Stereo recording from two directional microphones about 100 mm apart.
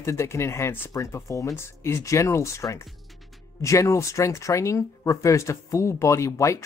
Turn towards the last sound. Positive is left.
turn(degrees=30)  # may be behind; listen again after turning